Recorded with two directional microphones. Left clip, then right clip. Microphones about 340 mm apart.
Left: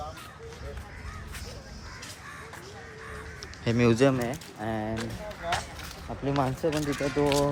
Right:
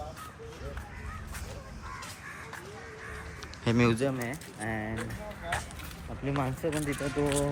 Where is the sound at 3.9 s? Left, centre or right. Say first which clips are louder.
Left 7 dB; left.